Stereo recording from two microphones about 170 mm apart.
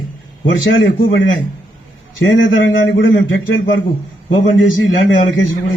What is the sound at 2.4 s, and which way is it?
Speech, 90° left.